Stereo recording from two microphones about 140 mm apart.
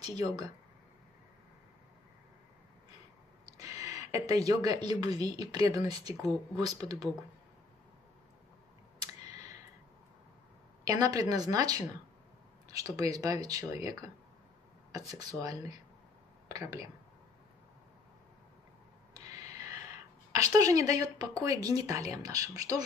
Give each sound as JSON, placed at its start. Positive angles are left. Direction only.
{"t": 0.0, "sound": "speech", "side_deg": -25}
{"t": 3.4, "sound": "speech", "side_deg": -20}
{"t": 9.3, "sound": "clicking", "side_deg": -25}
{"t": 10.9, "sound": "speech", "side_deg": -25}
{"t": 19.1, "sound": "a sound", "side_deg": -25}
{"t": 20.4, "sound": "speech", "side_deg": -25}